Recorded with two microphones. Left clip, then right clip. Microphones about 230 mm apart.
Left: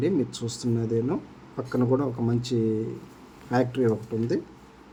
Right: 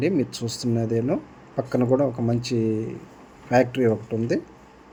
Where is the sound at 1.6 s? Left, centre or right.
Centre.